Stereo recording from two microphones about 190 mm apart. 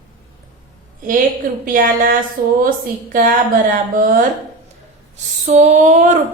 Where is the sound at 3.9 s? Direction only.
45° right (ahead or behind).